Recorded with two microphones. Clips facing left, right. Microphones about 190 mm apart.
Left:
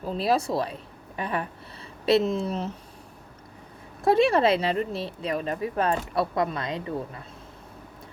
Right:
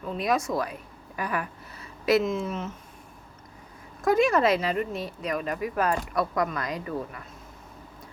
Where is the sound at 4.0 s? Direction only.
30° left (ahead or behind).